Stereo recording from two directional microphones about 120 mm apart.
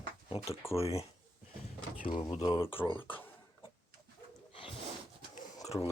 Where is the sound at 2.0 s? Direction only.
45° left (ahead or behind).